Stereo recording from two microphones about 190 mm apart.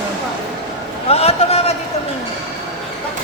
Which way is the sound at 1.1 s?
30° left (ahead or behind).